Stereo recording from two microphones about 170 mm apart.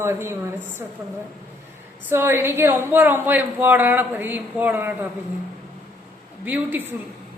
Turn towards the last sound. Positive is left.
turn(degrees=-10)  # may be behind; listen again after turning